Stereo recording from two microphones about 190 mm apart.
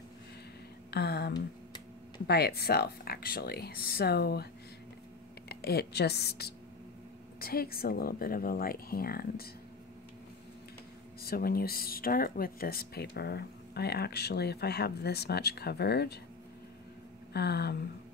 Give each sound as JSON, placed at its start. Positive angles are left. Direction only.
{"t": 0.9, "sound": "speech", "side_deg": 60}
{"t": 5.5, "sound": "speech", "side_deg": 55}
{"t": 11.2, "sound": "speech", "side_deg": 50}
{"t": 17.3, "sound": "speech", "side_deg": 60}